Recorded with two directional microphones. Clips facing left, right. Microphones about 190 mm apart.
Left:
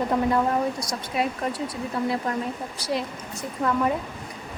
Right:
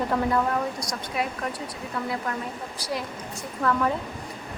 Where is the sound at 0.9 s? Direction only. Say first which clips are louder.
Left 3 dB; 25° left (ahead or behind).